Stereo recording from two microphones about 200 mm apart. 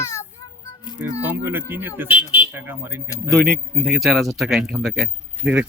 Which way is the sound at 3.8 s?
Centre (ahead or behind).